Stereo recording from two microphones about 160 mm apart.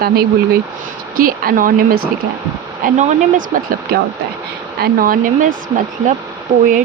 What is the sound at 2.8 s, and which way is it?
Speech, 45° right (ahead or behind).